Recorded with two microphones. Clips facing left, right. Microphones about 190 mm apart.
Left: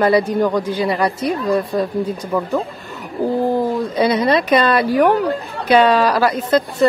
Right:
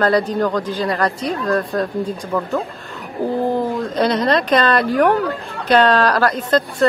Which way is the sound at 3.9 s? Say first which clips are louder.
Left 1 dB; 5° left (ahead or behind).